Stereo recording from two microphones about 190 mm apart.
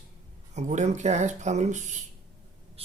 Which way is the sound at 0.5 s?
40° right (ahead or behind).